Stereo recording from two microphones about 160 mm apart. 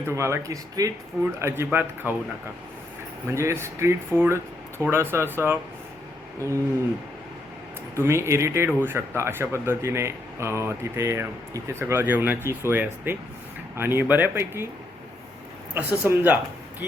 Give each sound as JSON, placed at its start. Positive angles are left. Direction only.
{"t": 0.1, "sound": "speech", "side_deg": -15}
{"t": 3.2, "sound": "speech", "side_deg": -15}
{"t": 7.9, "sound": "speech", "side_deg": -15}
{"t": 15.7, "sound": "speech", "side_deg": -15}